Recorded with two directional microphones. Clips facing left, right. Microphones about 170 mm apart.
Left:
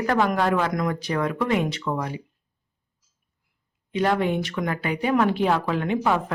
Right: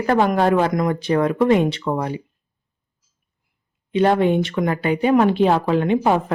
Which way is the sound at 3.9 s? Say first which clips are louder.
Right 6 dB; 25° right (ahead or behind).